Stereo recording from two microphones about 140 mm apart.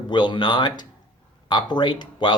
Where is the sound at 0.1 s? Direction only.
35° left (ahead or behind).